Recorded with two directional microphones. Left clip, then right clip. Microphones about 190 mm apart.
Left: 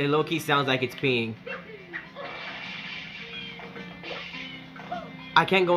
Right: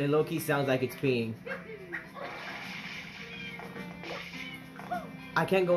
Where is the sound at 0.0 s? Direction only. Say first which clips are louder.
Left 4 dB; 15° left (ahead or behind).